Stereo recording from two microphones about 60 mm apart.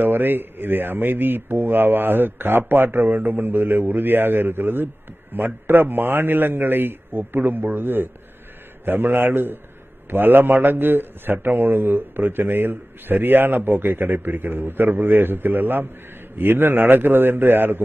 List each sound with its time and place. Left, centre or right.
0.0 s a man's voice: right